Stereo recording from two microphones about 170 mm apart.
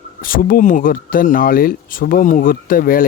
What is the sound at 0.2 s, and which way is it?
Speech, 55° left (ahead or behind).